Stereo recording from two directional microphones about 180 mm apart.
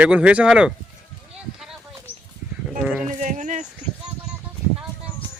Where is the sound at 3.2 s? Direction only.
45° right (ahead or behind).